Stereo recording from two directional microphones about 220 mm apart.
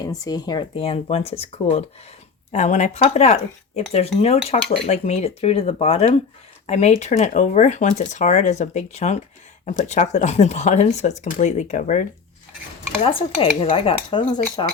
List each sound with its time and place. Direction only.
0.0 s speech: 20° left (ahead or behind); by 12.0 s 35° left (ahead or behind)
13.1 s speech: 25° left (ahead or behind)